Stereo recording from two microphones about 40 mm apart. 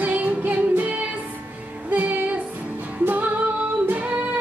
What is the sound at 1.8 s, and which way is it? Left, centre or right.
Music, right.